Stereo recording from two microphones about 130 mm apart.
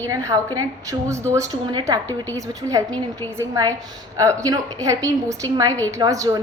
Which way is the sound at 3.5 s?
25° right (ahead or behind).